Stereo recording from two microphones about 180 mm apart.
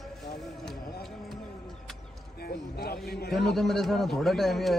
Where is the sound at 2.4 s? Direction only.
60° left (ahead or behind).